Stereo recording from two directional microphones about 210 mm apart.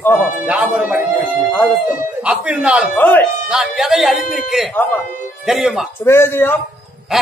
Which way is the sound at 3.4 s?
Centre (ahead or behind).